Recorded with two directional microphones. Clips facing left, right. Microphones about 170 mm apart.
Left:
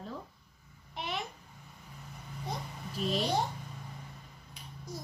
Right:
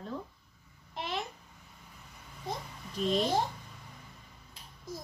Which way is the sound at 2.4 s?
Centre (ahead or behind).